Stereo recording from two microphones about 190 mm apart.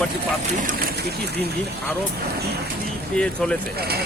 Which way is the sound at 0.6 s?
55° right (ahead or behind).